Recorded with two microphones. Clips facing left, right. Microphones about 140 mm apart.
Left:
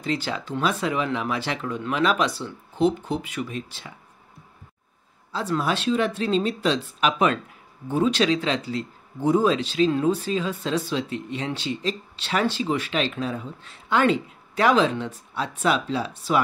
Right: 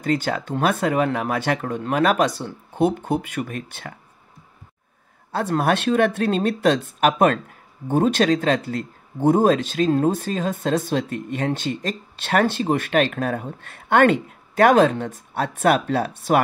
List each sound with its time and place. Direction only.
0.0 s speech: 50° right (ahead or behind)
5.3 s speech: 55° right (ahead or behind)